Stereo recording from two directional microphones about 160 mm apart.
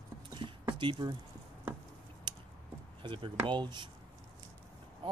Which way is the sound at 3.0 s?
30° right (ahead or behind).